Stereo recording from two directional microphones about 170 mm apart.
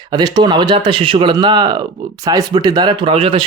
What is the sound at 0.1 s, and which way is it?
Speech, 25° right (ahead or behind).